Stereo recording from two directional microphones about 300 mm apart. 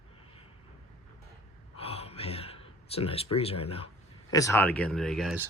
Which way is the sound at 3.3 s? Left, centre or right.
Centre.